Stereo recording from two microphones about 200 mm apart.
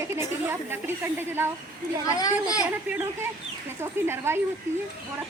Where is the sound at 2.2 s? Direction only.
15° left (ahead or behind).